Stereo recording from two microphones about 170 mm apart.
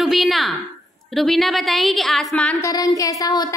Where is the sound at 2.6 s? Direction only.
20° left (ahead or behind).